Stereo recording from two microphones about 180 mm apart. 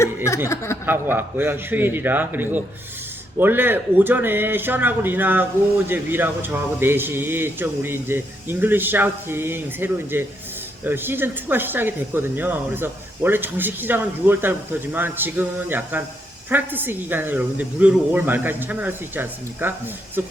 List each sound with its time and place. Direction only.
0.4 s speech: 15° left (ahead or behind)
0.9 s speech: 10° right (ahead or behind)